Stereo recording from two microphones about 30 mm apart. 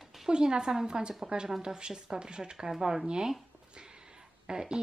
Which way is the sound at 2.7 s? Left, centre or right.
Centre.